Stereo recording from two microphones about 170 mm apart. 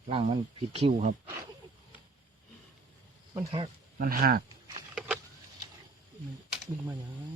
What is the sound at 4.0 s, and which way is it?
Speech, 55° right (ahead or behind).